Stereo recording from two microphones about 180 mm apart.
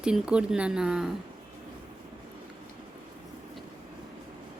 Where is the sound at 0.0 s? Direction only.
5° right (ahead or behind).